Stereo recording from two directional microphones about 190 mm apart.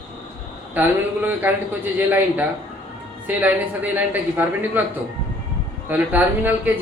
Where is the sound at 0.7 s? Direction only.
10° right (ahead or behind).